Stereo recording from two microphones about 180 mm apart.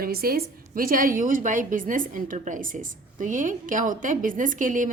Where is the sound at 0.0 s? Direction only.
55° right (ahead or behind).